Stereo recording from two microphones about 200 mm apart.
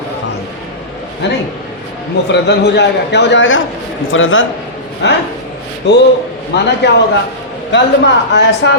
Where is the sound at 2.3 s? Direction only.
60° left (ahead or behind); by 4.4 s 75° left (ahead or behind).